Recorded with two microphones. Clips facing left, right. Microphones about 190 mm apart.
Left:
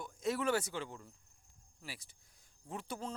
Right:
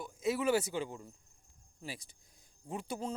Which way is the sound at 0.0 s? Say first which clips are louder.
Right 3 dB; 5° right (ahead or behind).